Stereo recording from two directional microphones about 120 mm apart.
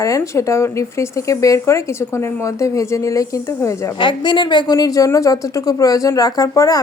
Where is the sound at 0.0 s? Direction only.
25° left (ahead or behind).